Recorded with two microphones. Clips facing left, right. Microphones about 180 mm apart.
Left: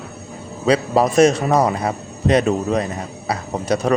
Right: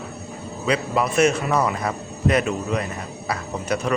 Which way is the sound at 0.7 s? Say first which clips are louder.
Left 6 dB; 40° left (ahead or behind).